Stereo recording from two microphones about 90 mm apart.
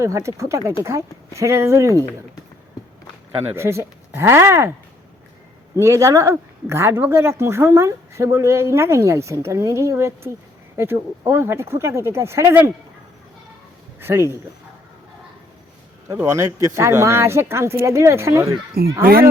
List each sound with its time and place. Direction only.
0.0 s a woman's voice: 35° right (ahead or behind)
3.5 s speech: 30° right (ahead or behind)
5.7 s a woman's voice: 35° right (ahead or behind)
14.0 s speech: 30° right (ahead or behind)
16.2 s a woman's voice: 35° right (ahead or behind)